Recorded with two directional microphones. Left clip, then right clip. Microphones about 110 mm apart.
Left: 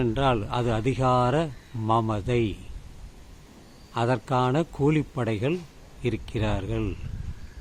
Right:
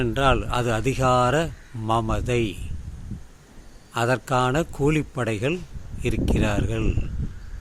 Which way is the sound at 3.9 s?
20° right (ahead or behind).